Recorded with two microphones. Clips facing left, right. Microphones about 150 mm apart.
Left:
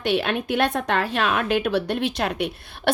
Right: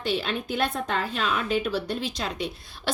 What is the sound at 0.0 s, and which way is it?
A woman's voice, 65° left (ahead or behind).